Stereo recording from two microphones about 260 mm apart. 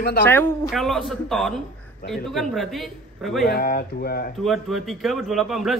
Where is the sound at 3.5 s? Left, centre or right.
Left.